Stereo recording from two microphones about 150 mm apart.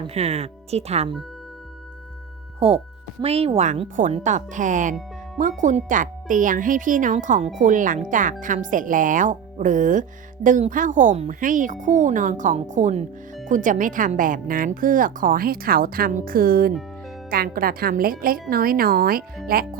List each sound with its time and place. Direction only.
0.1 s a woman's voice: 45° right (ahead or behind)
2.6 s a woman's voice: 40° right (ahead or behind); by 19.8 s 80° right